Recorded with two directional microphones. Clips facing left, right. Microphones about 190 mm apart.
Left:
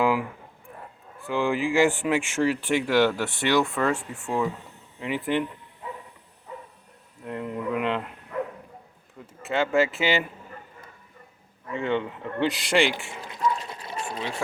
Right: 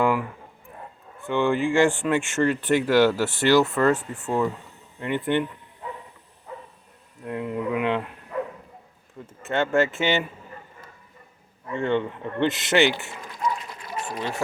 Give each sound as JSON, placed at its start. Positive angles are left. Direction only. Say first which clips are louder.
{"t": 0.0, "sound": "a sound", "louder": "right 1 dB", "side_deg": 10}
{"t": 1.3, "sound": "speech", "louder": "right 2 dB", "side_deg": 0}
{"t": 7.3, "sound": "speech", "louder": "right 2 dB", "side_deg": -5}
{"t": 9.4, "sound": "speech", "louder": "right 1 dB", "side_deg": 0}
{"t": 11.7, "sound": "speech", "louder": "right 2 dB", "side_deg": 0}
{"t": 13.7, "sound": "a sound", "louder": "left 1 dB", "side_deg": 25}